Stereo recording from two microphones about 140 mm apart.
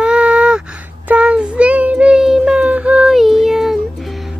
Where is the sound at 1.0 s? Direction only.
10° right (ahead or behind).